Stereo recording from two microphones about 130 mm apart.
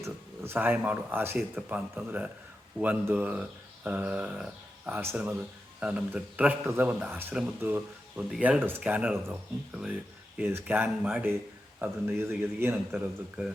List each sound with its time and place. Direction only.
0.0 s speech: 15° right (ahead or behind)